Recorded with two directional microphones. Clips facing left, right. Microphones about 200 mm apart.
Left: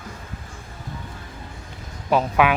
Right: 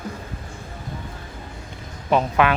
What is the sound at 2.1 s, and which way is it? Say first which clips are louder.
Speech: even; 5° left (ahead or behind).